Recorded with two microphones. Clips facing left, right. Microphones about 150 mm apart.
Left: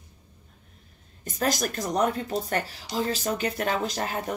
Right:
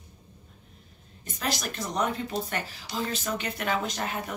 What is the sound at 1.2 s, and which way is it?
Speech, 45° left (ahead or behind).